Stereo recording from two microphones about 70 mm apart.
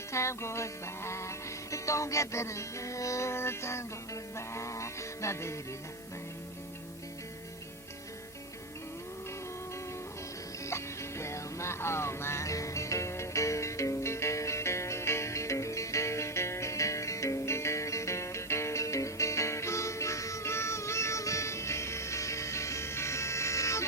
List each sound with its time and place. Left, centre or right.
0.1 s music: left
10.7 s music: left